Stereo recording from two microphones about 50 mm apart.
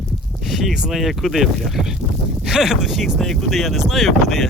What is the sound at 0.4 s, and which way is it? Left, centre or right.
Speech, centre.